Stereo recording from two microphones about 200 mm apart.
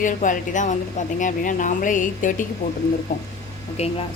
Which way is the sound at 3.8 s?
35° left (ahead or behind).